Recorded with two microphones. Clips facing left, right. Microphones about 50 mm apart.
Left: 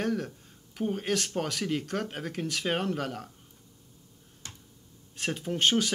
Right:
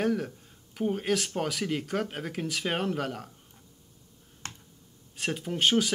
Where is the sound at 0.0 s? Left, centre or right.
Centre.